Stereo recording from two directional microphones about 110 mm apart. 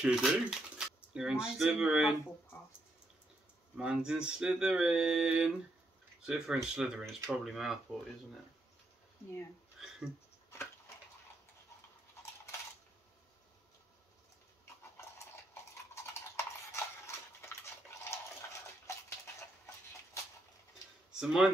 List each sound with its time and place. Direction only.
0.0 s speech: 5° right (ahead or behind)
3.7 s speech: 10° right (ahead or behind)
9.8 s a sound: 5° right (ahead or behind)
15.5 s horse: 25° left (ahead or behind)
21.1 s speech: 5° right (ahead or behind)